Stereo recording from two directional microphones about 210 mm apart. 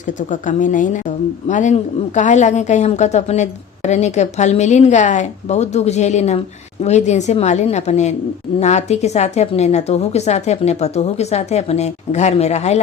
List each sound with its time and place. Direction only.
0.3 s a woman's voice: 40° left (ahead or behind)